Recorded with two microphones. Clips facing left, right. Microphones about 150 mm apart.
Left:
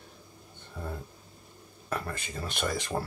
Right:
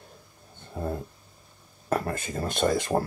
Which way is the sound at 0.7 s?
40° right (ahead or behind).